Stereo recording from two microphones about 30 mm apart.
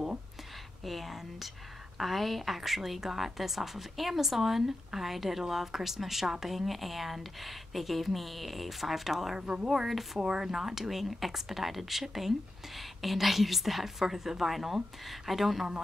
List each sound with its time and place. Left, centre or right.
0.8 s a woman's voice: centre
10.1 s a woman's voice: centre